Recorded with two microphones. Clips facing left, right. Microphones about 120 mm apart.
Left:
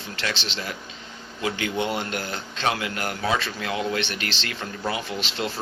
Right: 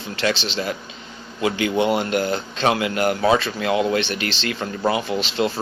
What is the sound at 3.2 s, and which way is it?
Speech, 40° right (ahead or behind).